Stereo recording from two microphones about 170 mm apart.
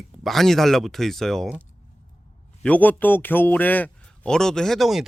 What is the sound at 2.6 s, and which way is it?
A man's voice, 10° left (ahead or behind).